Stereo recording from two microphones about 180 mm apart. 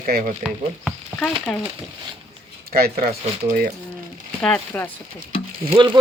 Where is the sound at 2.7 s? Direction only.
55° right (ahead or behind).